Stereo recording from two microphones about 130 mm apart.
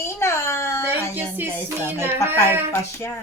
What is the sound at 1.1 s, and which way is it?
Speech, 15° right (ahead or behind).